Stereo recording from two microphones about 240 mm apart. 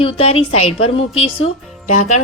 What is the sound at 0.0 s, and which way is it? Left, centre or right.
A woman's voice, left.